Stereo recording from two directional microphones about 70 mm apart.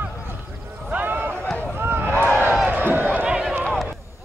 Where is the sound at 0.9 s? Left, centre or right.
Right.